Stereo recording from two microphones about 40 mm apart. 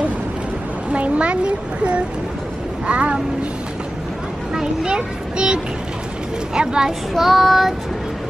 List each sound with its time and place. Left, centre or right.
0.9 s a woman's voice: right
4.6 s a child's voice: right
7.2 s child singing: centre